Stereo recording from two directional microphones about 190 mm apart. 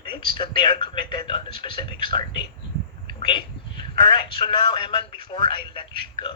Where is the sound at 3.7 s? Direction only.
25° left (ahead or behind).